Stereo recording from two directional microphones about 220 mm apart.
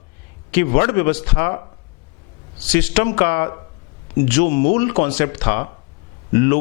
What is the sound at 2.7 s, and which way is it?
Speech, 10° left (ahead or behind).